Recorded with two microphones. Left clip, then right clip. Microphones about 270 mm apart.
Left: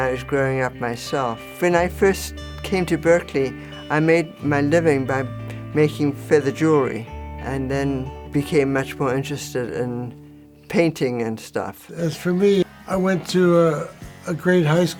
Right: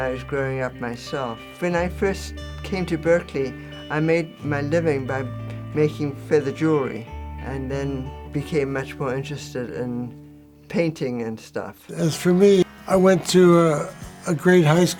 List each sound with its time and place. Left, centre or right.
0.0 s speech: left
11.9 s speech: right